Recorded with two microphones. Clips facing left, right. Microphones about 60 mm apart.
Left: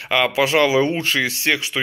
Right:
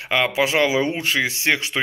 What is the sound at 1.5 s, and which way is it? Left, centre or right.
Speech, right.